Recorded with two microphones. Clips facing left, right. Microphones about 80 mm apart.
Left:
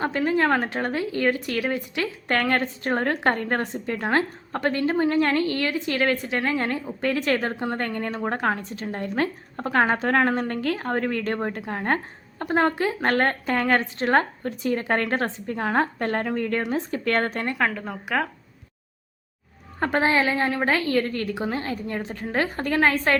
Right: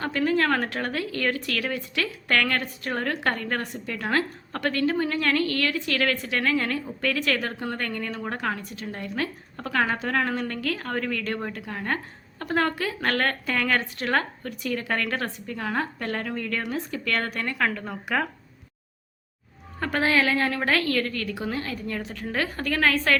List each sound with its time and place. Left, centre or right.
0.0 s a woman's voice: left
17.6 s a woman's voice: centre
19.8 s speech: left